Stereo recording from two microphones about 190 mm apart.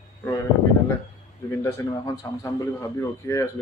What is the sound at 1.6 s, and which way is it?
A man's voice, 15° left (ahead or behind).